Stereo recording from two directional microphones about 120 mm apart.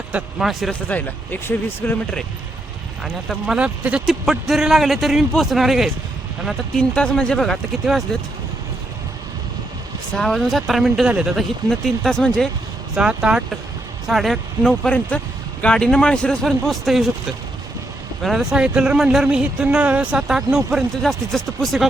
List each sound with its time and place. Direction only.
0.1 s speech: 5° right (ahead or behind)
0.7 s speech: 15° left (ahead or behind)
3.0 s speech: 5° right (ahead or behind)
10.1 s speech: 5° left (ahead or behind)
13.0 s speech: 10° right (ahead or behind)